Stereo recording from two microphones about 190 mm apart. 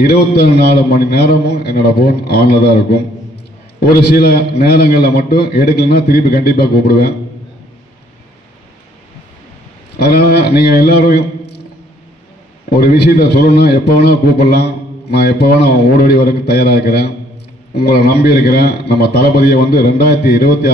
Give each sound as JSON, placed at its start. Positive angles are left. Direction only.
{"t": 0.0, "sound": "a man's voice", "side_deg": 60}
{"t": 9.9, "sound": "a man's voice", "side_deg": 55}
{"t": 12.6, "sound": "a man's voice", "side_deg": 55}